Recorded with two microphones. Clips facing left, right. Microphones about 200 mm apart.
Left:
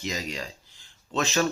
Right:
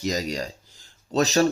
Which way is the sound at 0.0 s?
40° right (ahead or behind).